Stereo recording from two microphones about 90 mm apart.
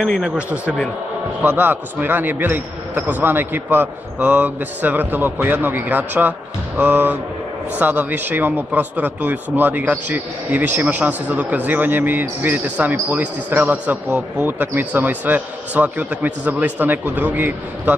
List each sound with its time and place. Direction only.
0.0 s a man's voice: centre (ahead or behind)
0.4 s a man's voice: 15° right (ahead or behind)